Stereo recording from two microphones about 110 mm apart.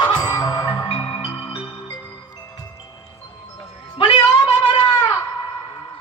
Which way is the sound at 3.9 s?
45° left (ahead or behind).